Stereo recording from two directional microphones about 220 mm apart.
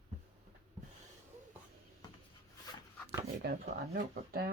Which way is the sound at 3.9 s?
40° right (ahead or behind).